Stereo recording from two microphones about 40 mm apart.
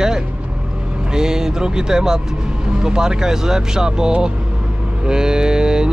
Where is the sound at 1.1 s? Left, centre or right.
Centre.